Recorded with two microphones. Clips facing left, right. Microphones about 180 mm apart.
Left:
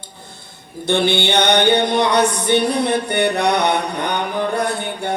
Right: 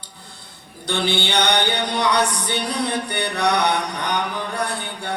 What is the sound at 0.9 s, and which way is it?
Mantra, 25° left (ahead or behind).